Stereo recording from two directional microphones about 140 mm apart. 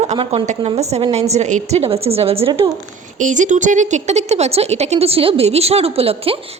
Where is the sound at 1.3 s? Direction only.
55° right (ahead or behind).